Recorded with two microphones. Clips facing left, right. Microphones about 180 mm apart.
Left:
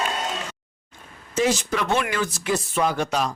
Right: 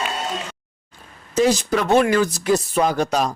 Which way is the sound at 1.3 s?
35° right (ahead or behind).